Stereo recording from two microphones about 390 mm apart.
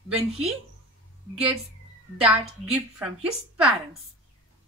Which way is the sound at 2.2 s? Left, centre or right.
Centre.